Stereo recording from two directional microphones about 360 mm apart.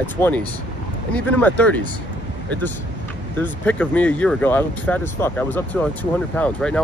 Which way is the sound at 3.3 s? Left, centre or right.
Centre.